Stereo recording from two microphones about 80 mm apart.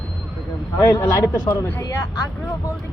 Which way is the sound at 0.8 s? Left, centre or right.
Left.